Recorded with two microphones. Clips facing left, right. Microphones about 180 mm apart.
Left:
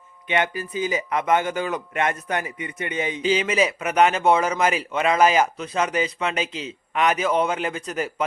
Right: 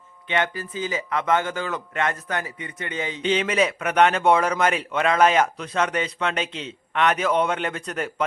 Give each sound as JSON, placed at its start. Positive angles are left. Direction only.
{"t": 0.3, "sound": "a man's voice", "side_deg": 15}
{"t": 3.2, "sound": "a man's voice", "side_deg": 5}